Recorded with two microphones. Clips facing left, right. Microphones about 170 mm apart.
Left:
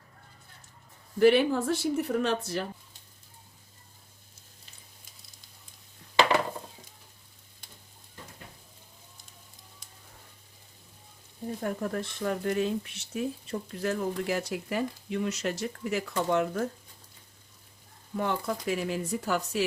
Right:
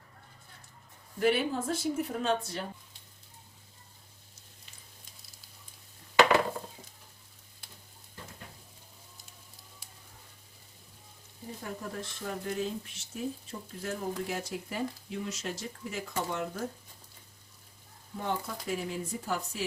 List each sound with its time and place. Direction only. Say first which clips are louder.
1.2 s speech: left 7 dB; 70° left (ahead or behind)
9.8 s a sound: even; 5° right (ahead or behind)
11.6 s speech: left 7 dB; 60° left (ahead or behind)
18.2 s speech: left 5 dB; 75° left (ahead or behind)